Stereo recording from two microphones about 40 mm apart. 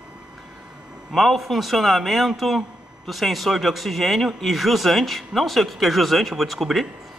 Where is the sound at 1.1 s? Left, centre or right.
Centre.